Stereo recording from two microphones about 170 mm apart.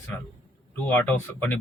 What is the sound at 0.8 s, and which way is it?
Speech, 10° left (ahead or behind).